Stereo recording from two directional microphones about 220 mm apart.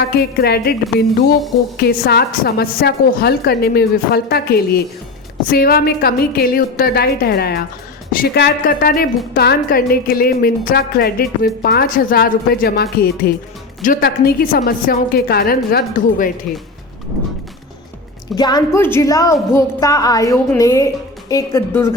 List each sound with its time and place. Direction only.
0.1 s a woman's voice: 45° left (ahead or behind)
18.3 s a woman's voice: 20° left (ahead or behind)